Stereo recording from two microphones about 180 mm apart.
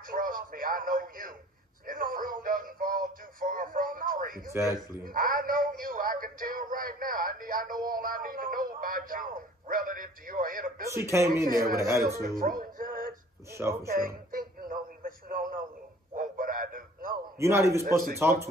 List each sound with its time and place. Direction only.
0.1 s speech: 50° right (ahead or behind)
4.5 s speech: 15° right (ahead or behind)
5.0 s speech: 50° right (ahead or behind)
10.9 s speech: 15° right (ahead or behind)
11.4 s speech: 55° right (ahead or behind)
11.7 s speech: 15° right (ahead or behind)
12.2 s music: 55° right (ahead or behind)
13.5 s speech: 15° right (ahead or behind)
13.8 s speech: 50° right (ahead or behind)
14.7 s radio: 50° right (ahead or behind)
16.2 s a sound: 50° right (ahead or behind)
17.4 s speech: 15° right (ahead or behind)